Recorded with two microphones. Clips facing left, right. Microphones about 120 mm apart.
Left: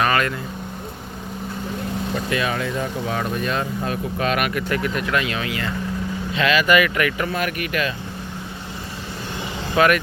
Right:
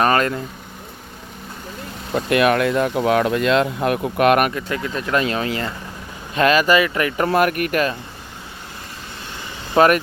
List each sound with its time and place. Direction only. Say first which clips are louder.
0.0 s speech: right 3 dB; 35° right (ahead or behind)
2.1 s speech: right 9 dB; 65° right (ahead or behind)
4.5 s speech: left 2 dB; 20° right (ahead or behind)
5.1 s speech: right 3 dB; 35° right (ahead or behind)
6.7 s speech: right 1 dB; 30° right (ahead or behind)
7.3 s speech: right 6 dB; 50° right (ahead or behind)
9.7 s speech: right 3 dB; 40° right (ahead or behind)